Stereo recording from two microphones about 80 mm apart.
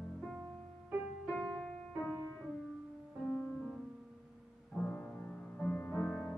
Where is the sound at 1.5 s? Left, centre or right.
Centre.